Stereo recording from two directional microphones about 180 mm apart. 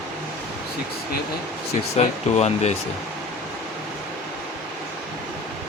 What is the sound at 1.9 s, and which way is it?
Speech, 40° left (ahead or behind).